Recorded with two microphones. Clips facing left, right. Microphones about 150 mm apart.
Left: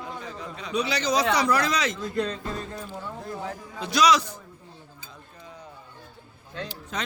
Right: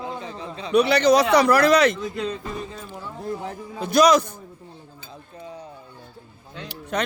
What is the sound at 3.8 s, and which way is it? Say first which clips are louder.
Speech: right 5 dB; 50° right (ahead or behind).